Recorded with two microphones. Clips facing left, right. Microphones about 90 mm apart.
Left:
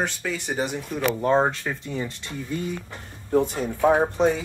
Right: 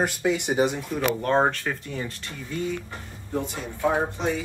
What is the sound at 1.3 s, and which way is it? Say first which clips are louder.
Speech: even; centre (ahead or behind).